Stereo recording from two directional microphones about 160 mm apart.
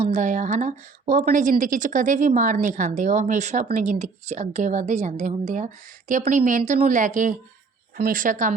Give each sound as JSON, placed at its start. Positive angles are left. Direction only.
{"t": 0.0, "sound": "a woman's voice", "side_deg": -50}